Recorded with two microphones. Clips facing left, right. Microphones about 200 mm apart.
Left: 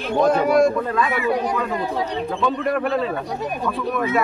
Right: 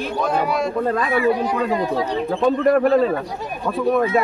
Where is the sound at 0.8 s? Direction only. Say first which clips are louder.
Right 2 dB; 35° right (ahead or behind).